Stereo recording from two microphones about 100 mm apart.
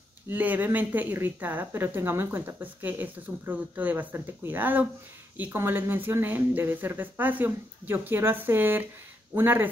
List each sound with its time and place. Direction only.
0.3 s speech: 20° right (ahead or behind)